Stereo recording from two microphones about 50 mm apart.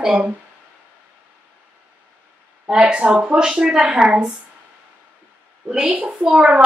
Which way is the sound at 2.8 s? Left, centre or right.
Right.